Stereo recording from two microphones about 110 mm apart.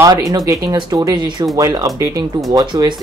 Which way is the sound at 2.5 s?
40° right (ahead or behind).